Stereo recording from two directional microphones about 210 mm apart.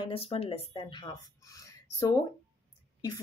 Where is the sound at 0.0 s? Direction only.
25° left (ahead or behind).